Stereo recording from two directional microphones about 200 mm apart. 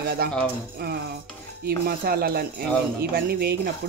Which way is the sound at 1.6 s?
50° right (ahead or behind).